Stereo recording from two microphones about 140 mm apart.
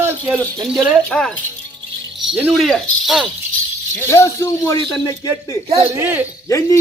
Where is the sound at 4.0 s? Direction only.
20° left (ahead or behind).